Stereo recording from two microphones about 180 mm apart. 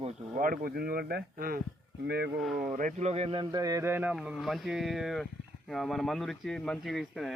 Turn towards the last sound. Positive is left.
turn(degrees=0)  # may be behind; listen again after turning